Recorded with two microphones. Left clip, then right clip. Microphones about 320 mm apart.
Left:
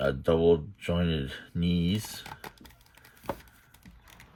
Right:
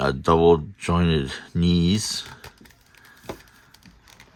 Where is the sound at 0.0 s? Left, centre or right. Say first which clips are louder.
Right 7 dB; centre.